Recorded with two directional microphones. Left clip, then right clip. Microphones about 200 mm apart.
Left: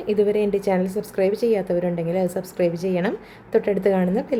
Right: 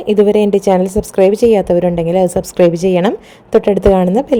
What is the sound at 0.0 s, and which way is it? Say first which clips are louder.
A woman's voice: right 9 dB; 35° right (ahead or behind).